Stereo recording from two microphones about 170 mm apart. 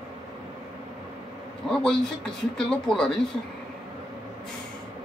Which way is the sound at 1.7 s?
5° left (ahead or behind).